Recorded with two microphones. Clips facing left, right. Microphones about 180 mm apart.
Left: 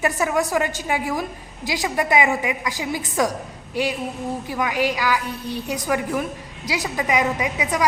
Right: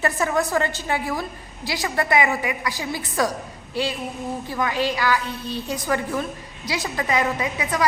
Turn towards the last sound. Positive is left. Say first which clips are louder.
# left 2 dB
turn(degrees=15)  # may be behind; listen again after turning